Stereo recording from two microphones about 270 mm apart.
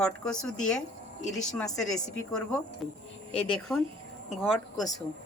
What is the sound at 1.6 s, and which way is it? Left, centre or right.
Speech, centre.